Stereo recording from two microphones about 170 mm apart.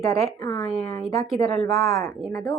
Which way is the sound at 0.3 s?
20° left (ahead or behind).